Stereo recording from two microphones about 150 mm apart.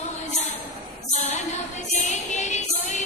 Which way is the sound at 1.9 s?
50° left (ahead or behind).